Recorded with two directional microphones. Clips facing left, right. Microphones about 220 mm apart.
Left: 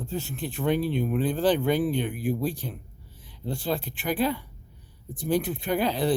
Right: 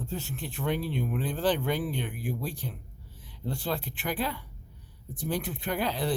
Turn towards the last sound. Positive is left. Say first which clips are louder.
# left 5 dB
turn(degrees=15)  # may be behind; listen again after turning